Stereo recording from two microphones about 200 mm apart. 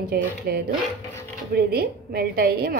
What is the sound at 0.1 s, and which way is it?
A woman's voice, 50° right (ahead or behind).